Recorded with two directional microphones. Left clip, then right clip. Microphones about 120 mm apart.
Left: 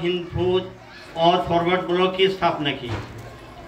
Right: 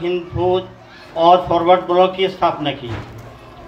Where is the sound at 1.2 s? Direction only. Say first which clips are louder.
Right 6 dB; 40° left (ahead or behind).